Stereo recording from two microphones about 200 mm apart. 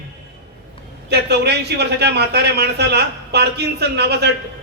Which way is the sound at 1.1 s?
55° right (ahead or behind).